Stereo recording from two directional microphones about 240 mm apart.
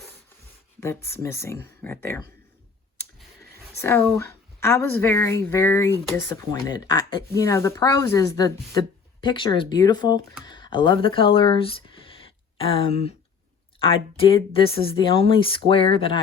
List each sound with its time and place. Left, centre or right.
0.8 s speech: centre
3.8 s speech: centre